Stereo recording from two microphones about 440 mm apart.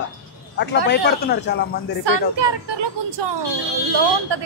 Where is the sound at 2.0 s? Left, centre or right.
Right.